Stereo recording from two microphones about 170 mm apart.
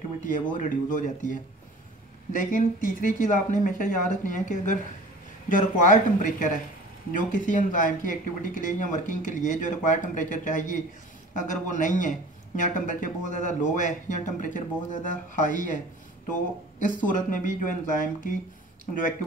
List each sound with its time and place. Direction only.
0.2 s a man's voice: 50° left (ahead or behind)
17.0 s a man's voice: 50° left (ahead or behind)